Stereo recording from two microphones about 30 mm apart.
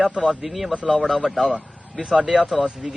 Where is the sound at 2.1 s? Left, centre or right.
Right.